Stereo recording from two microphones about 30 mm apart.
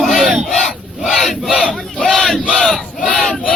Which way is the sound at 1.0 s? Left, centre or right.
Centre.